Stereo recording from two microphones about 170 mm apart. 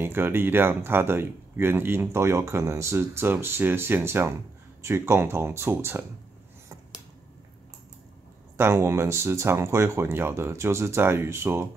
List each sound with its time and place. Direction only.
0.0 s speech: 15° right (ahead or behind)
8.5 s speech: 15° right (ahead or behind)